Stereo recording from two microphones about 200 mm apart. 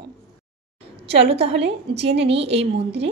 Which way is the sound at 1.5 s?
60° right (ahead or behind).